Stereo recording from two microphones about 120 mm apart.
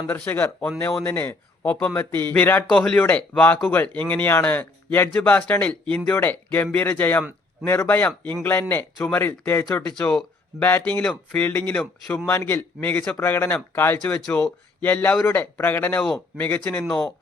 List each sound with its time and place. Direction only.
0.1 s speech: 15° left (ahead or behind)
9.9 s speech: 5° left (ahead or behind)
12.3 s speech: 20° left (ahead or behind)
14.0 s speech: 5° left (ahead or behind)